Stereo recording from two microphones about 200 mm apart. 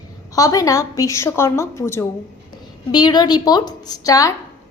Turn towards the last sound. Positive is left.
turn(degrees=15)  # may be behind; listen again after turning